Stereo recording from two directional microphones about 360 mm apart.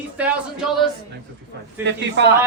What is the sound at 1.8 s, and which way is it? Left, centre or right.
Speech, right.